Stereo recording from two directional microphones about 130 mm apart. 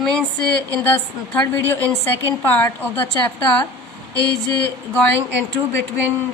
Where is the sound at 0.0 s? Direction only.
10° left (ahead or behind).